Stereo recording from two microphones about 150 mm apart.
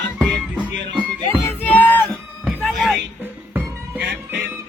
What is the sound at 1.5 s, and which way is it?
Music, 10° left (ahead or behind).